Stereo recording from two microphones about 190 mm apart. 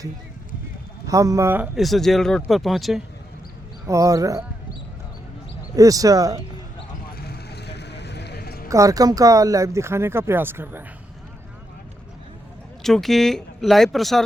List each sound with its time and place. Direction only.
1.0 s speech: 15° right (ahead or behind); by 3.0 s centre (ahead or behind)
3.8 s speech: 15° right (ahead or behind)
5.7 s speech: 20° right (ahead or behind)
7.1 s a sound: 55° left (ahead or behind)
8.7 s speech: 15° right (ahead or behind)
12.8 s speech: centre (ahead or behind)